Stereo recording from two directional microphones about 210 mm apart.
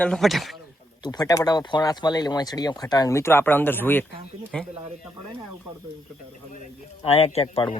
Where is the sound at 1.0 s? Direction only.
15° left (ahead or behind); by 4.6 s centre (ahead or behind).